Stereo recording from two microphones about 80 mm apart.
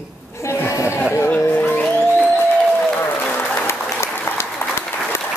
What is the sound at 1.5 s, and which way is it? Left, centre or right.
Music, left.